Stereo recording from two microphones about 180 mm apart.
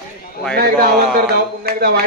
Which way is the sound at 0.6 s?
60° right (ahead or behind).